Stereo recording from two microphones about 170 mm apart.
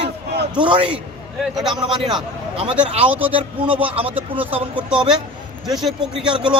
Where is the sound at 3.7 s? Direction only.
10° right (ahead or behind).